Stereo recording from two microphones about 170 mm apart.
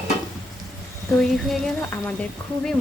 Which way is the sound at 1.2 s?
Centre (ahead or behind).